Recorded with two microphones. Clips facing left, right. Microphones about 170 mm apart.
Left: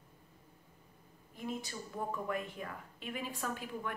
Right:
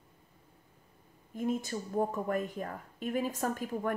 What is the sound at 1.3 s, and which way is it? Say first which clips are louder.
A woman's voice: right 8 dB; 45° right (ahead or behind).